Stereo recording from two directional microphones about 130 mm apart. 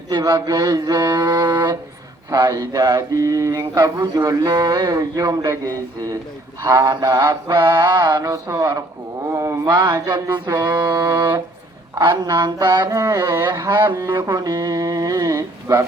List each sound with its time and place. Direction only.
0.1 s a sound: 30° right (ahead or behind)
2.3 s mantra: 30° right (ahead or behind)
9.6 s mantra: 35° right (ahead or behind)